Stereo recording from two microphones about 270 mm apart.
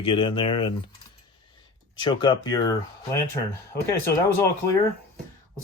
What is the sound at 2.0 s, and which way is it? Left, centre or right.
Speech, centre.